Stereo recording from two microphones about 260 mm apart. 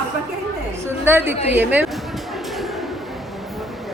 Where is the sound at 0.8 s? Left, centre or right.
Centre.